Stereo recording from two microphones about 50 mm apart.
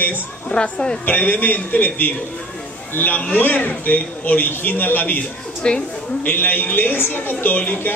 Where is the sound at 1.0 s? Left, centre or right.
Left.